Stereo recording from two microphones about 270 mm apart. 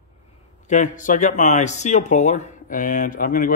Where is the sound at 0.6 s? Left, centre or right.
Left.